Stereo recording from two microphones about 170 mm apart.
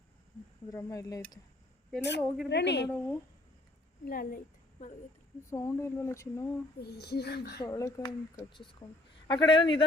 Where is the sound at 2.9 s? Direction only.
5° left (ahead or behind).